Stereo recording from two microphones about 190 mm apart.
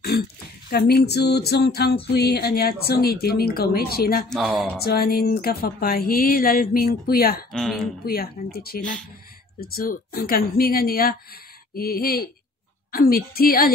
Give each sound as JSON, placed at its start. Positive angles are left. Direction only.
{"t": 0.7, "sound": "speech", "side_deg": 55}
{"t": 4.3, "sound": "speech", "side_deg": 0}
{"t": 4.8, "sound": "speech", "side_deg": 55}
{"t": 7.5, "sound": "speech", "side_deg": 5}
{"t": 8.0, "sound": "speech", "side_deg": 55}